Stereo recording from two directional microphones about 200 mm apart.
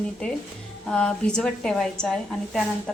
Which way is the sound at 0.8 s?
5° left (ahead or behind).